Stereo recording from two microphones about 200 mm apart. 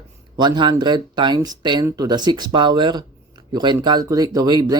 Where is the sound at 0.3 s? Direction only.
20° right (ahead or behind).